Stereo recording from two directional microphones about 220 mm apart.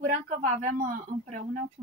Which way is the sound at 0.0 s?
35° right (ahead or behind).